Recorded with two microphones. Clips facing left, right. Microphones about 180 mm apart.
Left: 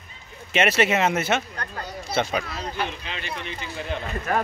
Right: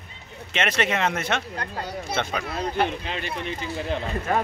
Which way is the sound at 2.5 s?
50° right (ahead or behind).